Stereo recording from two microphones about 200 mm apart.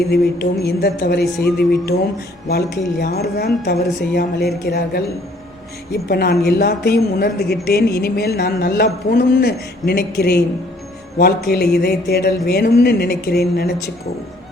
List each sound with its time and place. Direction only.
0.1 s speech: 55° left (ahead or behind)
11.4 s speech: 50° left (ahead or behind)